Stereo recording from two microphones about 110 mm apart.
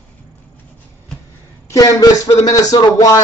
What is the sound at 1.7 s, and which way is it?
Speech, 35° left (ahead or behind).